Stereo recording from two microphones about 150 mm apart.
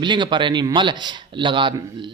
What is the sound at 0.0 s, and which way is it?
Speech, 30° right (ahead or behind).